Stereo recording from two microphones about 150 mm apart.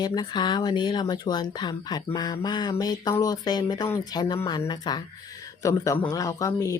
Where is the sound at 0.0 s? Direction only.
25° left (ahead or behind).